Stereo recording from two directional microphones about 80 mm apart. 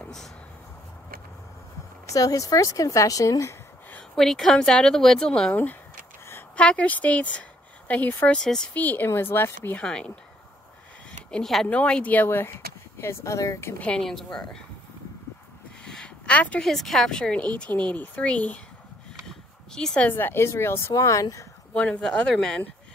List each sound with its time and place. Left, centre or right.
2.1 s a woman's voice: left
4.1 s speech: centre
5.5 s a woman's voice: left
8.4 s speech: centre
8.7 s a woman's voice: left
9.8 s speech: centre
11.2 s speech: centre; by 13.7 s left
13.7 s speech: centre
15.8 s a sound: centre
16.6 s a woman's voice: centre
19.2 s a sound: centre
20.1 s speech: left
20.9 s a woman's voice: left
21.7 s speech: centre